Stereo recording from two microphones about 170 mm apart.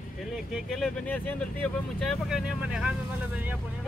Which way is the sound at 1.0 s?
10° left (ahead or behind).